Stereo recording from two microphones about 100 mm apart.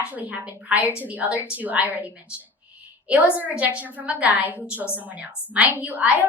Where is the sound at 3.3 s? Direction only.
15° right (ahead or behind).